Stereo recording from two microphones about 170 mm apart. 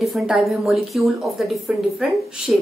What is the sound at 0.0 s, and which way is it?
A woman's voice, centre (ahead or behind).